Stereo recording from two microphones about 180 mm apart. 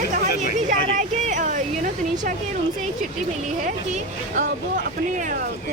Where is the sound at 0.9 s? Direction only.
45° right (ahead or behind).